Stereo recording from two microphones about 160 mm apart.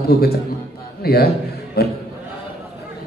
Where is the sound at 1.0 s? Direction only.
75° left (ahead or behind).